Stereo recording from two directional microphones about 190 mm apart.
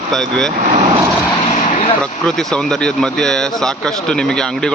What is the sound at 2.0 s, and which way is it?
Speech, 5° left (ahead or behind).